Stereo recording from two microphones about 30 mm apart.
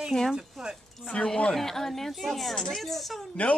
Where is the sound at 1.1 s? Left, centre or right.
Left.